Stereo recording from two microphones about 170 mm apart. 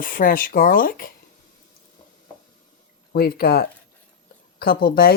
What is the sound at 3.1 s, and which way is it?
Speech, 65° left (ahead or behind).